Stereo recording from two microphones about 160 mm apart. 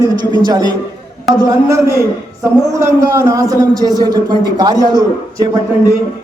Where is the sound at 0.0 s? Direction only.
25° right (ahead or behind).